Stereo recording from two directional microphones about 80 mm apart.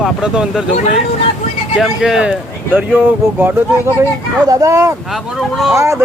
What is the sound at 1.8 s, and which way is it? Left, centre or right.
Speech, centre.